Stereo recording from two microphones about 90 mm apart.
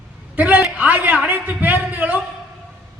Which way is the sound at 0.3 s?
20° right (ahead or behind).